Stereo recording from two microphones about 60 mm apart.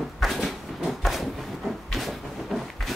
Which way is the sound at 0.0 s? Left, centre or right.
Centre.